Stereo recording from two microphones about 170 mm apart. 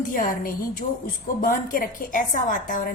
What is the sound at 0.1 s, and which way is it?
A woman's voice, 55° left (ahead or behind).